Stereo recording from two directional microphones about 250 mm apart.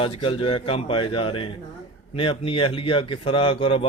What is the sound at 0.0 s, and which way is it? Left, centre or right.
Speech, left.